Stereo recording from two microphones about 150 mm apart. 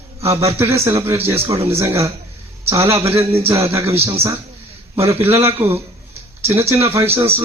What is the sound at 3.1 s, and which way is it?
Speech, 40° right (ahead or behind).